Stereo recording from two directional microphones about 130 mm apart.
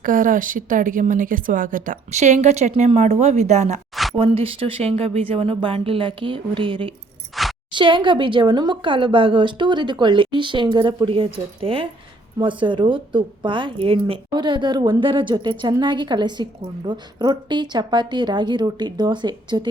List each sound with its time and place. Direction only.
0.0 s a woman's voice: 90° right; by 3.8 s 60° right (ahead or behind)
4.1 s a woman's voice: 45° right (ahead or behind)
7.4 s a sound: centre (ahead or behind)
7.7 s speech: 40° right (ahead or behind)